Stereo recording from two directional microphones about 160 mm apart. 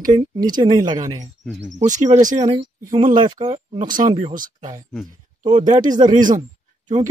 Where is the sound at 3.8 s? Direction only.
55° right (ahead or behind).